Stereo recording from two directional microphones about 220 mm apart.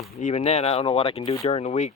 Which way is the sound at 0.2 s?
30° left (ahead or behind).